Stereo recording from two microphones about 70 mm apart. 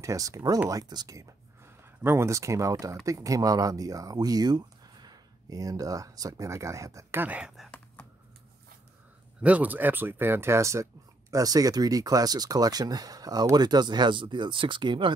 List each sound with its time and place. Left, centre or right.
0.0 s speech: right
2.0 s speech: right
7.2 s speech: centre
9.4 s speech: right